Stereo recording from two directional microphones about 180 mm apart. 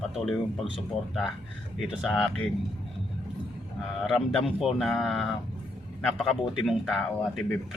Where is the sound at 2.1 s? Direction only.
5° left (ahead or behind).